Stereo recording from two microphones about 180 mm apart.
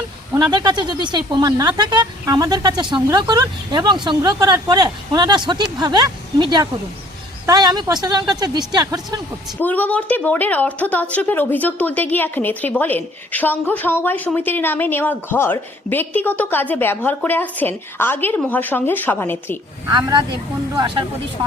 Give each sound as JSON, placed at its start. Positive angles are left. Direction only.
{"t": 0.5, "sound": "speech", "side_deg": -25}
{"t": 9.6, "sound": "a woman's voice", "side_deg": 10}
{"t": 19.9, "sound": "speech", "side_deg": -25}